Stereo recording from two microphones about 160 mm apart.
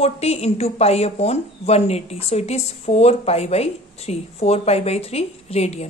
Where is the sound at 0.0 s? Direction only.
40° left (ahead or behind).